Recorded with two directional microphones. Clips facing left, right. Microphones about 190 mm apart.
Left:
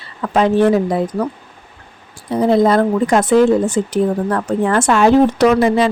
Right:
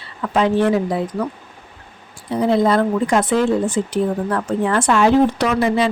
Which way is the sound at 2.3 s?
45° left (ahead or behind).